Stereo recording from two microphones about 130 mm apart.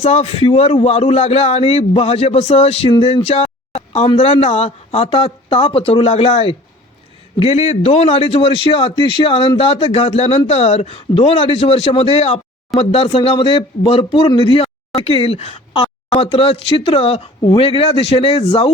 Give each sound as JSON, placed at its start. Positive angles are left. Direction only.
{"t": 0.0, "sound": "a man's voice", "side_deg": 55}
{"t": 15.7, "sound": "a sound", "side_deg": 35}
{"t": 16.2, "sound": "a man's voice", "side_deg": 50}